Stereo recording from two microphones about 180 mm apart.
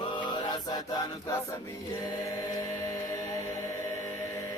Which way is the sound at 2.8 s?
20° left (ahead or behind).